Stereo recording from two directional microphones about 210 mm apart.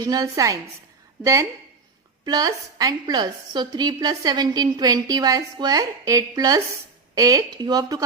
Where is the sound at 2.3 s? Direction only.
15° right (ahead or behind).